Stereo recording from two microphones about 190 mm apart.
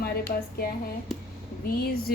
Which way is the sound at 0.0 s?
55° left (ahead or behind).